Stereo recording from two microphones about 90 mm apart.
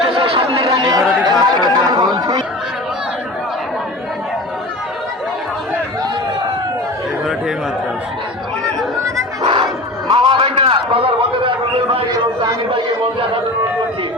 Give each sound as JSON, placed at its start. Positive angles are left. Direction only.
{"t": 0.1, "sound": "chatter", "side_deg": -75}
{"t": 0.5, "sound": "chatter", "side_deg": -45}
{"t": 9.4, "sound": "crowd", "side_deg": -65}
{"t": 10.1, "sound": "a sound", "side_deg": -75}